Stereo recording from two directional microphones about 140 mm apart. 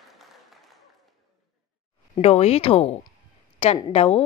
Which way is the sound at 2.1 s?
50° left (ahead or behind).